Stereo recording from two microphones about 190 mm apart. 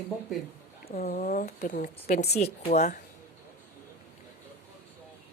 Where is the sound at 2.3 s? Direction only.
35° left (ahead or behind).